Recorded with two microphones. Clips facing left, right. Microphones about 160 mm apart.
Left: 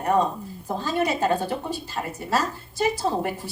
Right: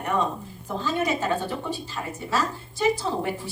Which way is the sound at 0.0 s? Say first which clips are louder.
Left 4 dB; 40° left (ahead or behind).